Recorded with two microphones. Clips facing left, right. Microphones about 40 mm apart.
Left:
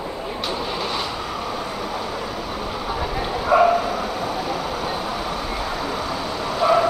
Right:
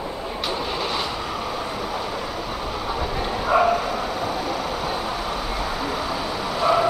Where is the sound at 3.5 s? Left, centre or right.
Centre.